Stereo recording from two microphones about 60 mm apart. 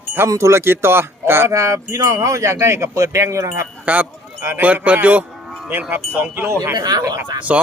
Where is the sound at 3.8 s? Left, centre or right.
Right.